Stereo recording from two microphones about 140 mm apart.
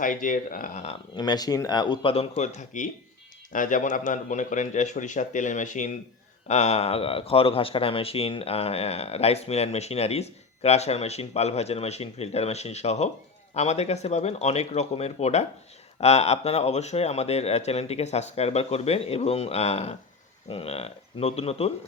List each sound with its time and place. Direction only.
0.0 s speech: 70° left (ahead or behind)
1.1 s speech: 30° left (ahead or behind); by 5.9 s 60° left (ahead or behind)
6.5 s speech: 50° left (ahead or behind)